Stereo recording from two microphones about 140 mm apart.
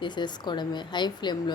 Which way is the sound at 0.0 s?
30° left (ahead or behind).